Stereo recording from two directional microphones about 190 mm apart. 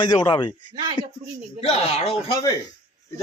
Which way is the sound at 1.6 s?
35° left (ahead or behind).